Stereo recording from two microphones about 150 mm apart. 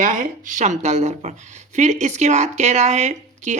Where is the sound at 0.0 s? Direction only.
60° right (ahead or behind).